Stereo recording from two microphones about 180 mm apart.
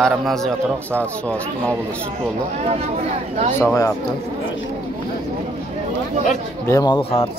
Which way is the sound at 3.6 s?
15° left (ahead or behind).